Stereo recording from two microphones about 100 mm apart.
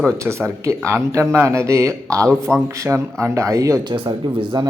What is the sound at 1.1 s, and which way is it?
A man's voice, 25° right (ahead or behind).